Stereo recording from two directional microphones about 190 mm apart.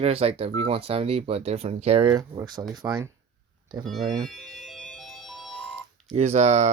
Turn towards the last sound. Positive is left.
turn(degrees=-40)  # may be behind; listen again after turning